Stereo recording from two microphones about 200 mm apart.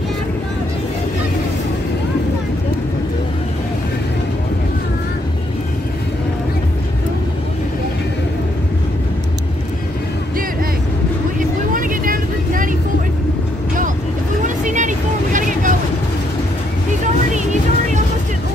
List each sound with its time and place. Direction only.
11.3 s vehicle: 45° right (ahead or behind)
14.4 s vehicle: 40° right (ahead or behind)